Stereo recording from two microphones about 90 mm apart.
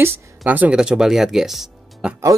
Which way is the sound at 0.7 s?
10° right (ahead or behind).